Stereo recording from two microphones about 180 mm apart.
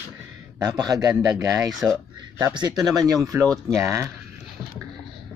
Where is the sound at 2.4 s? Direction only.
20° right (ahead or behind).